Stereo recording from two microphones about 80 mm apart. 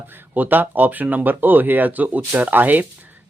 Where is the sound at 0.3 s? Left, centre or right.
Right.